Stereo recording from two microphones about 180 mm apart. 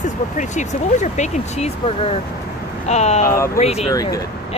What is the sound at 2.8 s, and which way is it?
Speech, 40° left (ahead or behind).